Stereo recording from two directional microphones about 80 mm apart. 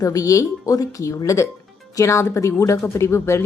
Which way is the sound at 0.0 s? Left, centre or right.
Left.